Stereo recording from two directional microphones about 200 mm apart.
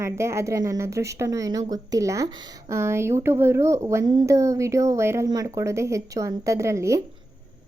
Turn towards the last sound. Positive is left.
turn(degrees=-15)  # may be behind; listen again after turning